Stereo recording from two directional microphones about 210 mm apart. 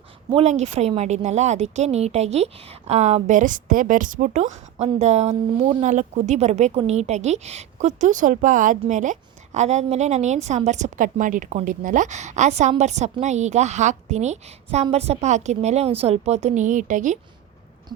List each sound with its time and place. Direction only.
0.3 s a woman's voice: 30° right (ahead or behind)